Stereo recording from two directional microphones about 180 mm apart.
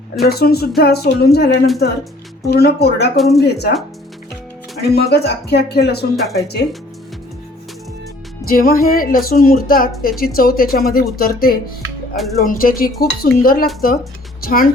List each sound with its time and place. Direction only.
0.2 s speech: 60° left (ahead or behind)
3.2 s speech: centre (ahead or behind)
3.4 s speech: 65° left (ahead or behind)
4.8 s speech: 65° left (ahead or behind)
8.4 s a woman's voice: 55° left (ahead or behind)